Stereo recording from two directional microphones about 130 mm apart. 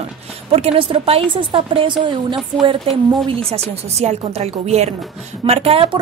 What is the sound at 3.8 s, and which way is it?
A woman's voice, 55° right (ahead or behind).